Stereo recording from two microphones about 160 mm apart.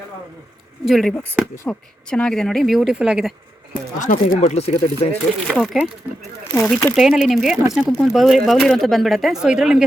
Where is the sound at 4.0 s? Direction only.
50° left (ahead or behind).